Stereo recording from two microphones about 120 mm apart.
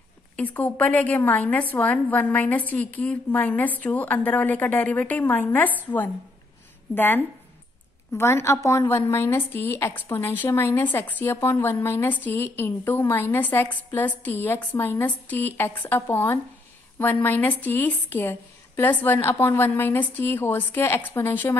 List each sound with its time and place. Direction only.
0.4 s a woman's voice: 10° left (ahead or behind)
8.1 s a woman's voice: 20° left (ahead or behind)